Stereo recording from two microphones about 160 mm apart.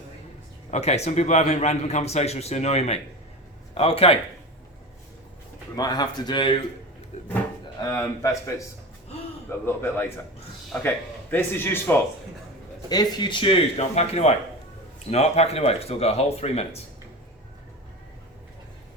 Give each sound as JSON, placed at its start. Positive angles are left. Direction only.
{"t": 0.7, "sound": "a man's voice", "side_deg": 45}
{"t": 5.7, "sound": "speech", "side_deg": 25}
{"t": 7.8, "sound": "speech", "side_deg": 20}
{"t": 12.9, "sound": "speech", "side_deg": 25}